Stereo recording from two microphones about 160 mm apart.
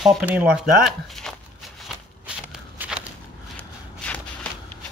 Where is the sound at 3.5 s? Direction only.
10° left (ahead or behind).